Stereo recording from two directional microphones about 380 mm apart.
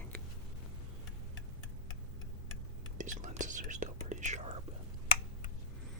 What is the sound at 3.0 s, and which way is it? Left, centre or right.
Whispering, centre.